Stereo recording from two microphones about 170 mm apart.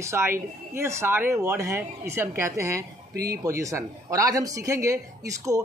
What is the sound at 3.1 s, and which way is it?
Speech, 65° right (ahead or behind).